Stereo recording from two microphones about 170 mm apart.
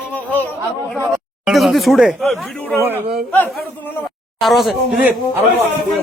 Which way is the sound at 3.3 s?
10° left (ahead or behind).